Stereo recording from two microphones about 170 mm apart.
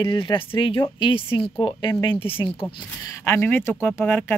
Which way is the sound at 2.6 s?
15° left (ahead or behind).